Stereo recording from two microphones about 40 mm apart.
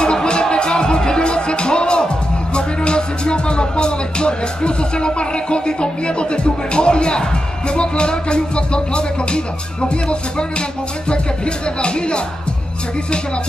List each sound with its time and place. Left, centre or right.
0.0 s music: left
11.8 s music: left